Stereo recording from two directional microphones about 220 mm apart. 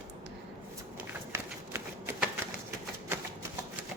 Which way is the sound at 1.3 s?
10° right (ahead or behind).